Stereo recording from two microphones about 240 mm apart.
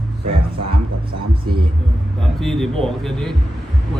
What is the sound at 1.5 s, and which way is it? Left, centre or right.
Speech, right.